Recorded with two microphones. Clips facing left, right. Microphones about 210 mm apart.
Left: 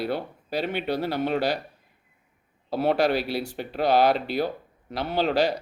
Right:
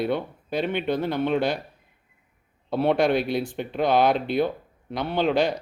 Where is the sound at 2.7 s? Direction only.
5° left (ahead or behind).